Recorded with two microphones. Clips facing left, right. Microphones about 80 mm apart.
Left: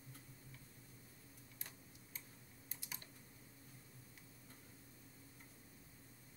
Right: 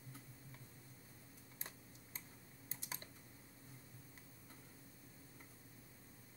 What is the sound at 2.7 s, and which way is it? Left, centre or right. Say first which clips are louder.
Typing: right 3 dB; right.